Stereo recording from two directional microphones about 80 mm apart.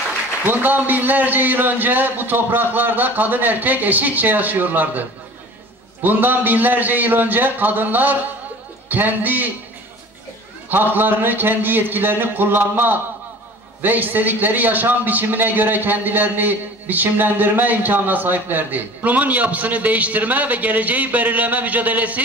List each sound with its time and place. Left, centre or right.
0.5 s a man's voice: right
6.0 s a man's voice: right
10.7 s a man's voice: right